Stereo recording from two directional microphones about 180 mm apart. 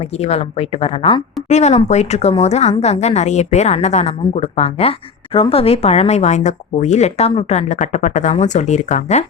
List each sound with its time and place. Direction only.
0.0 s a woman's voice: 35° left (ahead or behind)